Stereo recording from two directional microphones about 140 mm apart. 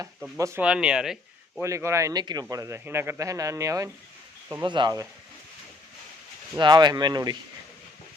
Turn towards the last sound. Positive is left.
turn(degrees=-30)  # may be behind; listen again after turning